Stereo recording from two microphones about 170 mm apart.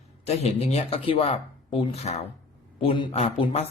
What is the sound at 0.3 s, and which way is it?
Speech, 40° left (ahead or behind).